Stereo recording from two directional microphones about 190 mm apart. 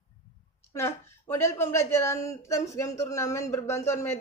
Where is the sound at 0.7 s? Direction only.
15° left (ahead or behind).